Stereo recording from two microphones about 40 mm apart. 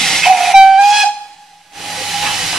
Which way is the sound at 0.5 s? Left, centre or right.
Centre.